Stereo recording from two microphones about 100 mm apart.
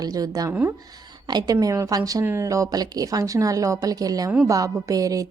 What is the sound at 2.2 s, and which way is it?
A woman's voice, 25° right (ahead or behind).